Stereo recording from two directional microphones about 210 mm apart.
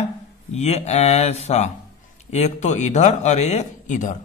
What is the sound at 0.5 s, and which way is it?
A man's voice, 30° left (ahead or behind).